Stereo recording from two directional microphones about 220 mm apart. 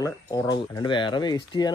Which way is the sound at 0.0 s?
15° left (ahead or behind).